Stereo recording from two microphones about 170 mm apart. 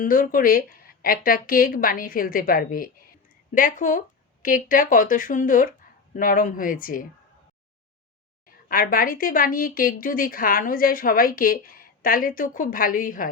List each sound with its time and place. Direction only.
0.0 s speech: 55° left (ahead or behind)
8.7 s speech: 55° left (ahead or behind)